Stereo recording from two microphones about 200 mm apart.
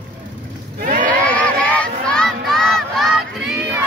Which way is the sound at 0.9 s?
40° right (ahead or behind).